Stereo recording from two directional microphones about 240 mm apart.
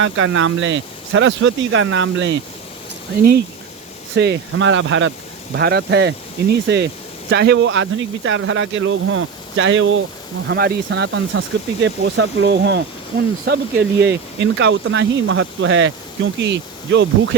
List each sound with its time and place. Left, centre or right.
0.0 s speech: right
4.1 s speech: right